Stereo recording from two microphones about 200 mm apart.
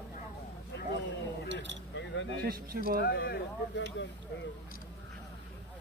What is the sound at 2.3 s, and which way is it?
Speech, 50° right (ahead or behind).